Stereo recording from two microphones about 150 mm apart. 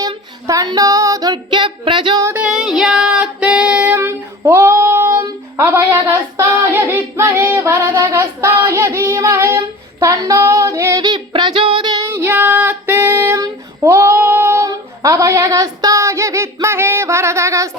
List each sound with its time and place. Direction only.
0.4 s female singing: 25° right (ahead or behind)
2.2 s female singing: 10° right (ahead or behind); by 11.9 s 30° right (ahead or behind)
12.1 s child singing: 15° right (ahead or behind)